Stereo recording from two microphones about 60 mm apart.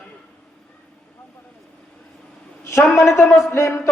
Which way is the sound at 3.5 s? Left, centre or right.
Left.